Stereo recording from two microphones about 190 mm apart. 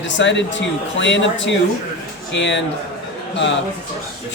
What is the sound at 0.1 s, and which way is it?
Speech, 70° left (ahead or behind).